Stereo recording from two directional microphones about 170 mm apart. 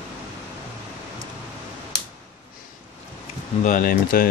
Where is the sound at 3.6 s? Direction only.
50° left (ahead or behind).